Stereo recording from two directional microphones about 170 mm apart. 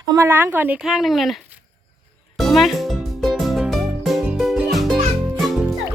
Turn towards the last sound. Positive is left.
turn(degrees=0)  # may be behind; listen again after turning